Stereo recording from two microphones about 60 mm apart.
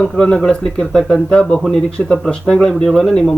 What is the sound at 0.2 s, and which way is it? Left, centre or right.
Speech, centre.